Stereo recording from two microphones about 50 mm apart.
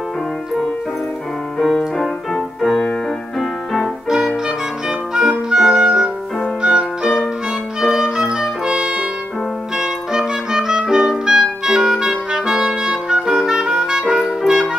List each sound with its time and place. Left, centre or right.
1.6 s music: centre
4.5 s clarinet: centre
6.6 s music: centre
8.2 s music: centre
9.8 s clarinet: centre